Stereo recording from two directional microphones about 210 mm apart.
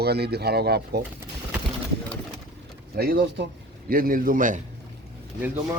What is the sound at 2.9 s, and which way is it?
A man's voice, 45° right (ahead or behind).